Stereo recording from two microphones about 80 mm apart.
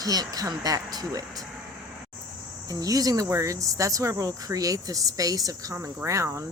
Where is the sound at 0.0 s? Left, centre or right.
Right.